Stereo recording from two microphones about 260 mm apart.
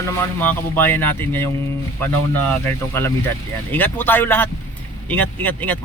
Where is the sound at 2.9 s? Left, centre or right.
Centre.